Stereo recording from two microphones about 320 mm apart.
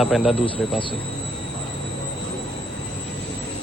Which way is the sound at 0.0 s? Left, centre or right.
Centre.